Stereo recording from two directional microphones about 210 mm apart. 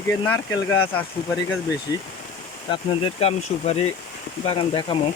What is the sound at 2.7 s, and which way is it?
Speech, 25° left (ahead or behind).